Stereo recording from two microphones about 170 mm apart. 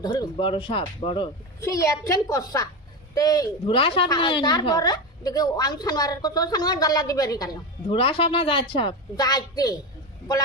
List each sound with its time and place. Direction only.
0.0 s speech: 25° left (ahead or behind)
1.6 s a woman's voice: 20° left (ahead or behind)